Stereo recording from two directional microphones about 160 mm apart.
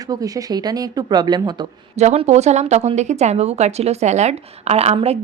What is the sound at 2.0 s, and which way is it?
A woman's voice, 45° right (ahead or behind).